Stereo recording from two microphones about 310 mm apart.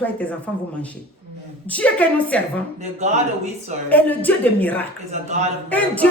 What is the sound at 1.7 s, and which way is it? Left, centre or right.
Speech, centre.